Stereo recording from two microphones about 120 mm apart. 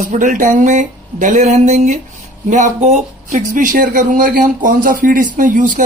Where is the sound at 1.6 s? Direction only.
70° right (ahead or behind).